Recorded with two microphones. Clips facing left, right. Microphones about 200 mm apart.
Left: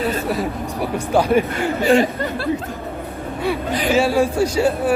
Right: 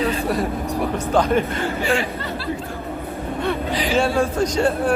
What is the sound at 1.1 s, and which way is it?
Speech, 10° left (ahead or behind).